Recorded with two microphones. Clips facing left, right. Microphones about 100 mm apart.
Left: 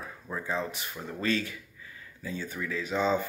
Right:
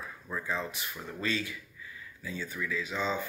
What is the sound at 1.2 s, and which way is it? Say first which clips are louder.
Speech: left 4 dB; 40° left (ahead or behind).